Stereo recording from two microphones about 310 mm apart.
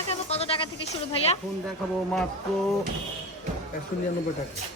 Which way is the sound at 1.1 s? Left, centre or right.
Centre.